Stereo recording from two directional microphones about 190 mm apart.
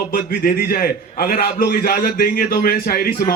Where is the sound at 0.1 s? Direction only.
50° left (ahead or behind).